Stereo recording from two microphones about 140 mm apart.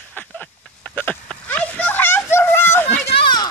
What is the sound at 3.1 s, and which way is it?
Children playing, 35° left (ahead or behind).